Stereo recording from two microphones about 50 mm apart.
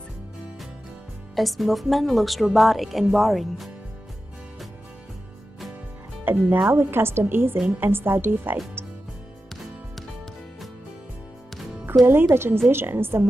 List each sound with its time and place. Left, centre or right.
1.3 s speech: centre
6.2 s speech: right
6.7 s a woman's voice: right
11.8 s a woman's voice: right